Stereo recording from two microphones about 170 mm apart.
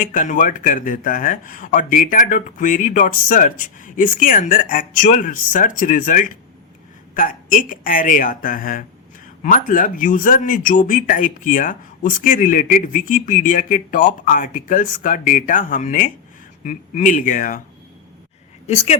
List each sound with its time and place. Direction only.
0.0 s speech: 50° left (ahead or behind)
18.6 s speech: 40° left (ahead or behind)